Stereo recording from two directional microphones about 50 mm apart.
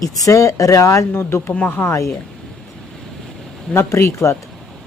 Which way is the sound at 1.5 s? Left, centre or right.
Left.